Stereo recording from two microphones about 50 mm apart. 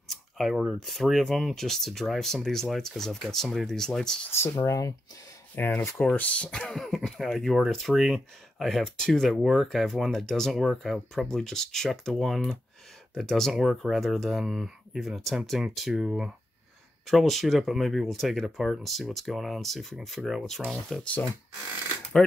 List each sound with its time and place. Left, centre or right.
0.1 s speech: centre
4.3 s speech: left
5.6 s speech: left
6.1 s speech: left
6.7 s speech: centre
9.4 s speech: centre
15.9 s speech: centre
17.1 s speech: centre
22.1 s speech: centre